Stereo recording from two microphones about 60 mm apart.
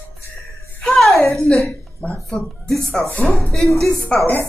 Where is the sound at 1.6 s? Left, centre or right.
Left.